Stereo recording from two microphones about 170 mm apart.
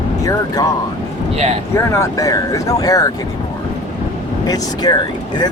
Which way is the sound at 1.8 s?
20° left (ahead or behind).